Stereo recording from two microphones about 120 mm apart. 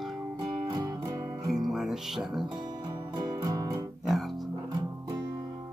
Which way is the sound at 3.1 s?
30° right (ahead or behind).